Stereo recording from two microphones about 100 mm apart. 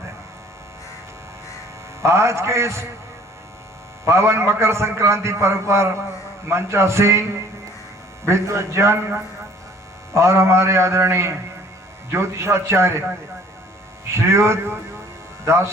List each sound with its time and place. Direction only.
2.0 s a man's voice: 25° right (ahead or behind)
4.0 s a man's voice: 30° right (ahead or behind)
14.1 s a man's voice: 25° right (ahead or behind)